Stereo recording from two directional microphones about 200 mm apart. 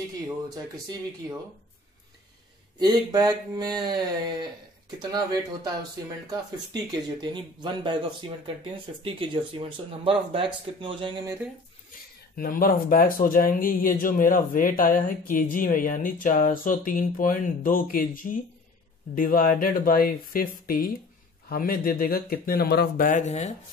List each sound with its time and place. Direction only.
2.8 s speech: 20° right (ahead or behind)
12.4 s speech: 45° left (ahead or behind)